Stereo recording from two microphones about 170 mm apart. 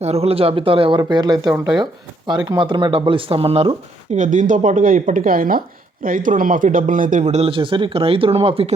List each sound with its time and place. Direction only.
0.0 s speech: 35° right (ahead or behind)
4.2 s speech: 50° right (ahead or behind)